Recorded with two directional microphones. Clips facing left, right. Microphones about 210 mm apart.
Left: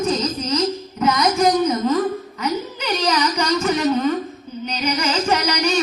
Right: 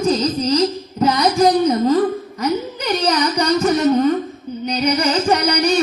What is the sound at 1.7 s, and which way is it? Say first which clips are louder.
Music: right 4 dB; 35° right (ahead or behind).